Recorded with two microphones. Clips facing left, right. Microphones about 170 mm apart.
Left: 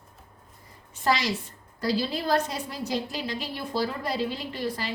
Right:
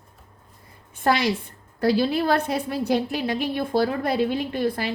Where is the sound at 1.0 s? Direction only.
55° right (ahead or behind).